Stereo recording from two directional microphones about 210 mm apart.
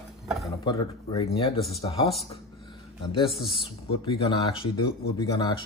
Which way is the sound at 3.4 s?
25° left (ahead or behind).